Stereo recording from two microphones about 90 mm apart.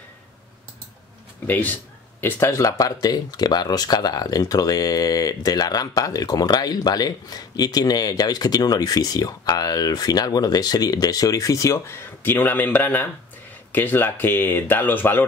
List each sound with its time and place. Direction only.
1.5 s speech: 20° left (ahead or behind)
2.5 s speech: 40° left (ahead or behind); by 15.2 s 20° left (ahead or behind)